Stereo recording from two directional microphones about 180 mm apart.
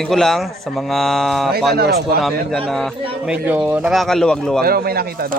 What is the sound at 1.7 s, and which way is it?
Speech, 60° right (ahead or behind).